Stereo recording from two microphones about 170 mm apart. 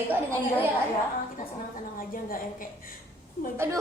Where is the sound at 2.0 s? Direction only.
55° left (ahead or behind).